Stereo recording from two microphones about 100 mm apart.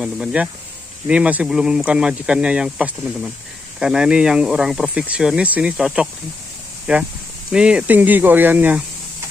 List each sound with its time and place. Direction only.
0.0 s speech: 10° right (ahead or behind)